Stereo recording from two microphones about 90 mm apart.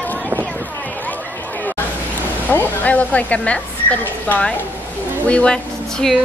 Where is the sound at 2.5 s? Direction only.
25° left (ahead or behind).